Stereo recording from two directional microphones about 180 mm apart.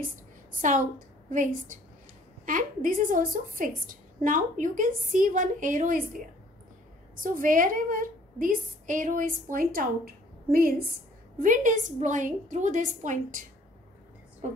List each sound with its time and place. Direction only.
0.5 s a woman's voice: 45° right (ahead or behind)
7.2 s a woman's voice: 50° right (ahead or behind)